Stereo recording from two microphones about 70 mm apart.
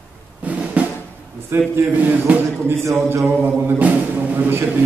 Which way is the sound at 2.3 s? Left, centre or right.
Centre.